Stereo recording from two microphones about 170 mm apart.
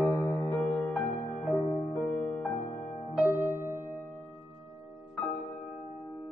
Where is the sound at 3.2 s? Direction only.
20° left (ahead or behind).